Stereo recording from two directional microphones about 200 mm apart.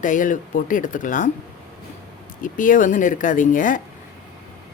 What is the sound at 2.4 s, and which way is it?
Speech, 40° left (ahead or behind).